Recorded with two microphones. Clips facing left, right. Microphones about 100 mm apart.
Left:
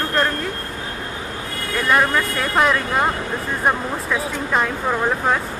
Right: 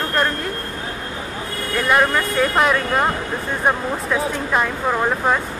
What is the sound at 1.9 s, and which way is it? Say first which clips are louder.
Speech: even; 5° right (ahead or behind).